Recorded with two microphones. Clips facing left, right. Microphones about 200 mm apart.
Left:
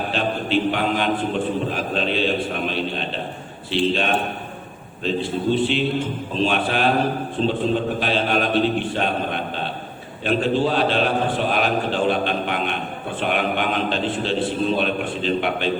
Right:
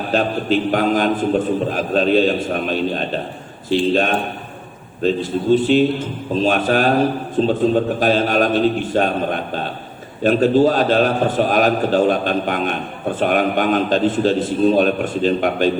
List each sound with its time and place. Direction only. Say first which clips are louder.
0.1 s a man's voice: right 6 dB; 45° right (ahead or behind)